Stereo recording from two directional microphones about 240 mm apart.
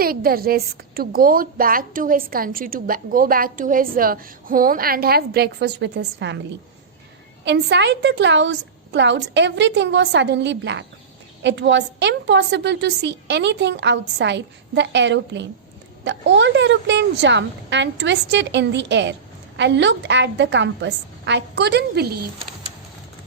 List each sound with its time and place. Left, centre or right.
0.0 s a woman's voice: right
7.4 s a woman's voice: right